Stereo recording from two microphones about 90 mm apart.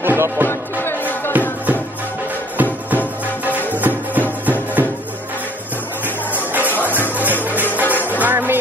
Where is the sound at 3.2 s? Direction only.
20° right (ahead or behind).